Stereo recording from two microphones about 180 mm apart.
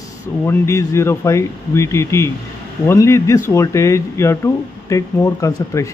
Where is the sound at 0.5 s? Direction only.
15° left (ahead or behind).